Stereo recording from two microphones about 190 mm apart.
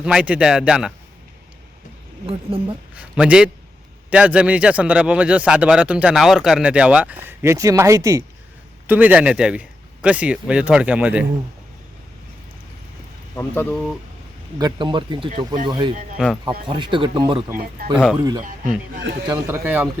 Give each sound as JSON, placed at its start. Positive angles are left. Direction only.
{"t": 0.0, "sound": "speech", "side_deg": -5}
{"t": 2.2, "sound": "speech", "side_deg": -30}
{"t": 2.9, "sound": "speech", "side_deg": -5}
{"t": 13.3, "sound": "speech", "side_deg": 10}
{"t": 14.6, "sound": "speech", "side_deg": -25}
{"t": 16.1, "sound": "speech", "side_deg": 5}
{"t": 16.6, "sound": "speech", "side_deg": -25}